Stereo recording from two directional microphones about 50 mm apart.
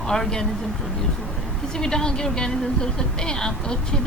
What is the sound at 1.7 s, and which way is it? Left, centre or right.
A woman's voice, centre.